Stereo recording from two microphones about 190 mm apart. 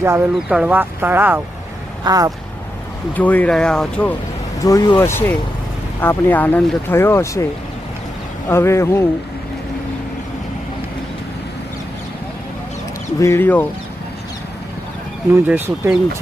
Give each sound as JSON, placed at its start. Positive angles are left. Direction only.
{"t": 0.0, "sound": "speech", "side_deg": -10}
{"t": 3.2, "sound": "speech", "side_deg": 10}
{"t": 4.6, "sound": "speech", "side_deg": 20}
{"t": 8.4, "sound": "speech", "side_deg": 15}
{"t": 13.1, "sound": "speech", "side_deg": 15}
{"t": 15.3, "sound": "speech", "side_deg": -10}